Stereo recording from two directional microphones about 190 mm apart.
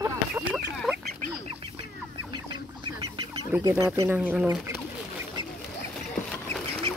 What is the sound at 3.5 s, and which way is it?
Speech, 15° right (ahead or behind).